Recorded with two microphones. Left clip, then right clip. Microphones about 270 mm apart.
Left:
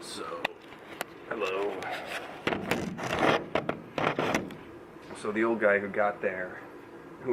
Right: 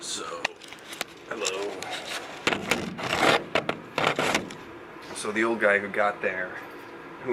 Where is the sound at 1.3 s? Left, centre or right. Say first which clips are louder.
Even; centre.